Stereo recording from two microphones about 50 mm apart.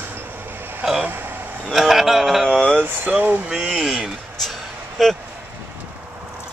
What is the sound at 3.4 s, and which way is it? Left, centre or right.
Speech, centre.